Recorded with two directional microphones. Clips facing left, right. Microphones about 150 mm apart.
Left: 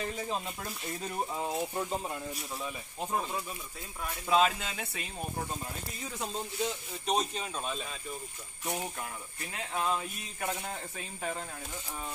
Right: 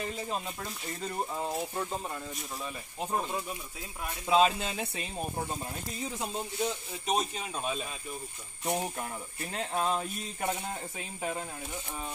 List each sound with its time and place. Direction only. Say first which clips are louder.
0.0 s speech: even; centre (ahead or behind)
1.6 s speech: left 1 dB; 15° left (ahead or behind)
2.5 s speech: even; centre (ahead or behind)
3.1 s speech: right 1 dB; 10° right (ahead or behind)
7.1 s speech: even; 5° right (ahead or behind)
8.9 s speech: right 3 dB; 30° right (ahead or behind)
10.8 s speech: right 2 dB; 15° right (ahead or behind)